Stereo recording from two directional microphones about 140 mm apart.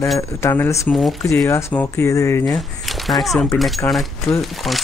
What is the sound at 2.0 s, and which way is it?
Speech, 20° left (ahead or behind).